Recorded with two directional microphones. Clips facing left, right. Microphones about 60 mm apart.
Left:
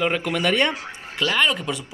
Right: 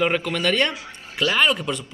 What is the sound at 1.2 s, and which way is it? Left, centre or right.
Speech, centre.